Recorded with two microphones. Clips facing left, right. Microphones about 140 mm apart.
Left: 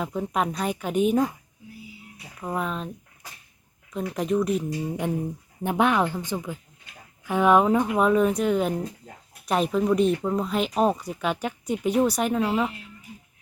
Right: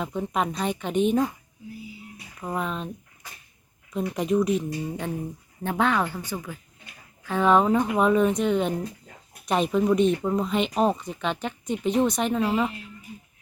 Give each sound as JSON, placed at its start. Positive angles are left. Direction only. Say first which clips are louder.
{"t": 0.0, "sound": "speech", "louder": "left 1 dB", "side_deg": 5}
{"t": 2.4, "sound": "speech", "louder": "left 1 dB", "side_deg": 0}
{"t": 3.9, "sound": "speech", "louder": "right 1 dB", "side_deg": 0}
{"t": 5.6, "sound": "a woman's voice", "louder": "left 2 dB", "side_deg": 15}